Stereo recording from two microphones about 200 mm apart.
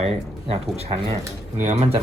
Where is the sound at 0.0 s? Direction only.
30° right (ahead or behind).